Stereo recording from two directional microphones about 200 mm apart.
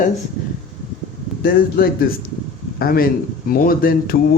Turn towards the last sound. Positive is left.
turn(degrees=45)  # may be behind; listen again after turning